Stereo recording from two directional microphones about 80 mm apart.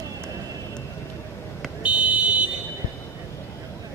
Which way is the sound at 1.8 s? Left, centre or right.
Centre.